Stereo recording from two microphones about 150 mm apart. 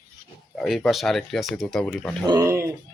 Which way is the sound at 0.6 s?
Centre (ahead or behind).